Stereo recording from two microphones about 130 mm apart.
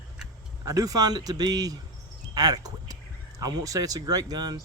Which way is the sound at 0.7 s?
25° right (ahead or behind).